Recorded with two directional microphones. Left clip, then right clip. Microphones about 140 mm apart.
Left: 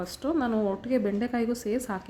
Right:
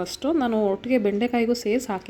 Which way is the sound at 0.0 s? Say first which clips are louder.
Right 5 dB; 15° right (ahead or behind).